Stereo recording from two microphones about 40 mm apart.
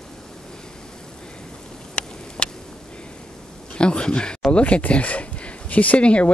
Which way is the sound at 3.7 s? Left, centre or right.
Left.